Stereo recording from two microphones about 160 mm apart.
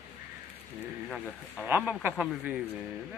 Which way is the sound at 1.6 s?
10° right (ahead or behind).